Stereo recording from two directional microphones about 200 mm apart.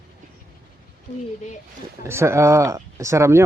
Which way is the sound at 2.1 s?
15° right (ahead or behind).